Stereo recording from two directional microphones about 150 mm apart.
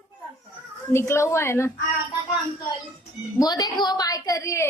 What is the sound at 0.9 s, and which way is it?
Speech, 20° left (ahead or behind).